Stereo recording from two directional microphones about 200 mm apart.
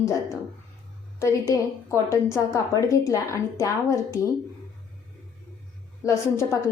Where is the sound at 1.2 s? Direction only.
15° left (ahead or behind).